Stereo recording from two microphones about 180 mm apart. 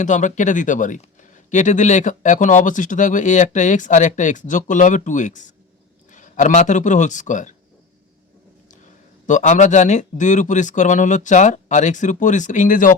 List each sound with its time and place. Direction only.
0.0 s a man's voice: 45° left (ahead or behind)
9.2 s speech: 45° left (ahead or behind)